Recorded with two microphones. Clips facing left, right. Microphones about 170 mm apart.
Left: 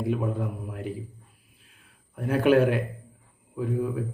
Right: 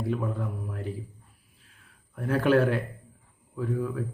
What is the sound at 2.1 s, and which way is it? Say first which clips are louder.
A man's voice: left 2 dB; 15° left (ahead or behind).